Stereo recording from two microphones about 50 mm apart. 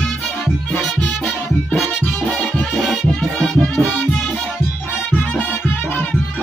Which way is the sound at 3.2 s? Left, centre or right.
Centre.